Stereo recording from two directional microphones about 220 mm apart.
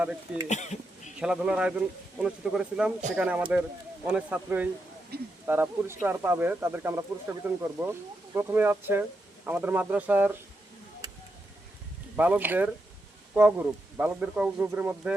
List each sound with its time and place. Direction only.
0.0 s speech: 5° right (ahead or behind)
0.4 s speech: 30° left (ahead or behind)
1.2 s speech: 5° right (ahead or behind)
5.1 s speech: 45° right (ahead or behind)
5.5 s speech: 10° right (ahead or behind)
12.1 s speech: 10° right (ahead or behind)